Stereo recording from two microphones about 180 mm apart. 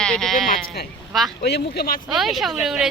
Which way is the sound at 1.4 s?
65° left (ahead or behind).